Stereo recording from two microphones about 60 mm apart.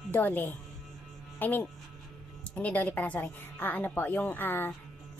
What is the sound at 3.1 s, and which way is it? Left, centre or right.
A woman's voice, left.